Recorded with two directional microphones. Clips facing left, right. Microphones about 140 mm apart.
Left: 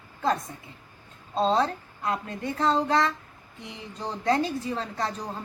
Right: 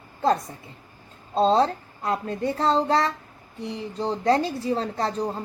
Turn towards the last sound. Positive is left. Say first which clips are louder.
# right 5 dB
turn(degrees=-35)  # may be behind; listen again after turning